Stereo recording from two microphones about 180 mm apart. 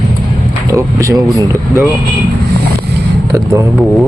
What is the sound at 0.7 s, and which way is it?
Speech, 15° right (ahead or behind).